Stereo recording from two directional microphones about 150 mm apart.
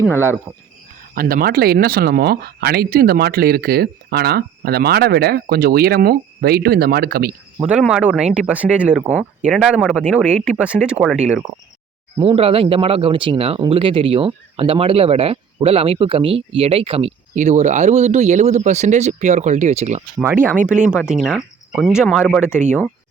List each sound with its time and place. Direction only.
0.0 s speech: 15° left (ahead or behind)
1.1 s speech: 80° right
7.6 s speech: 5° right (ahead or behind)
12.2 s speech: 40° right (ahead or behind)
17.3 s speech: 55° right (ahead or behind)
20.2 s speech: 15° right (ahead or behind)